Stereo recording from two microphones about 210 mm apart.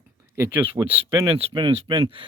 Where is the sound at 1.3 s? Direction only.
25° right (ahead or behind).